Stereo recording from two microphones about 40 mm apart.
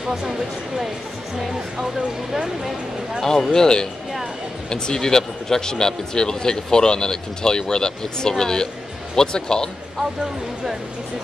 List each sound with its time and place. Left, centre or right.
0.0 s speech: centre
3.2 s a man's voice: centre